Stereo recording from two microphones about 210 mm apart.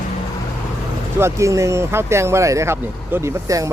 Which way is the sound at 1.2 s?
15° right (ahead or behind).